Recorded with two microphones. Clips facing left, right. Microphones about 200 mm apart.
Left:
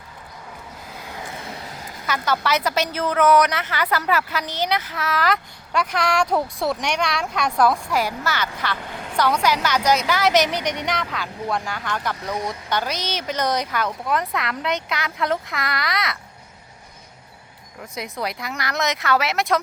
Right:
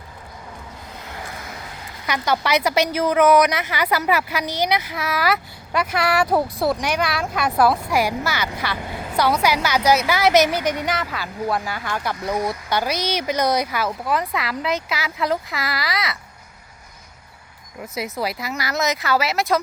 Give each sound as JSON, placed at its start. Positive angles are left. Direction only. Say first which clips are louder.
{"t": 1.3, "sound": "music", "louder": "left 1 dB", "side_deg": 30}
{"t": 2.0, "sound": "a woman's voice", "louder": "right 1 dB", "side_deg": -15}
{"t": 17.9, "sound": "speech", "louder": "right 3 dB", "side_deg": -5}